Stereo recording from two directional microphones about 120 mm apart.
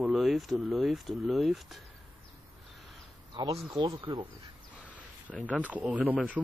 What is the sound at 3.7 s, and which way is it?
Speech, 35° right (ahead or behind).